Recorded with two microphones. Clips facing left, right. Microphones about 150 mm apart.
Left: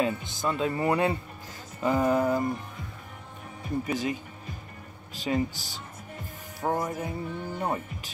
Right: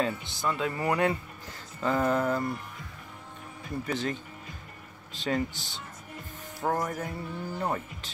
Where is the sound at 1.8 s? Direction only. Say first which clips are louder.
Left 2 dB; 15° left (ahead or behind).